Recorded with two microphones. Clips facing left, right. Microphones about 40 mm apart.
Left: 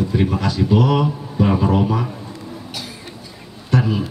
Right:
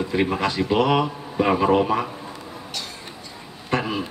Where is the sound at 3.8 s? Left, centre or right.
Centre.